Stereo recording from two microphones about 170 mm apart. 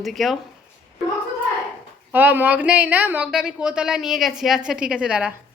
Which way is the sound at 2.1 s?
10° right (ahead or behind).